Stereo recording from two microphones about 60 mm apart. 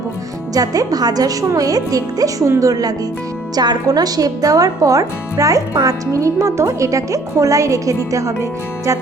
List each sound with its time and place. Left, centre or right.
0.5 s a woman's voice: right
3.5 s speech: right